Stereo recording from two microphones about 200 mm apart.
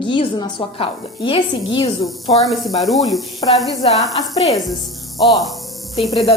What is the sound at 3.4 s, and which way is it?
Speech, 25° left (ahead or behind).